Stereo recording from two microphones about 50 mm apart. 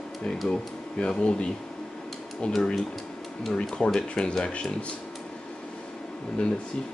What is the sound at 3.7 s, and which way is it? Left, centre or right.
Speech, centre.